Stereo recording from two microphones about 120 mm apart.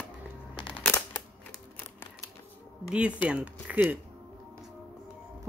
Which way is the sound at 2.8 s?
10° right (ahead or behind).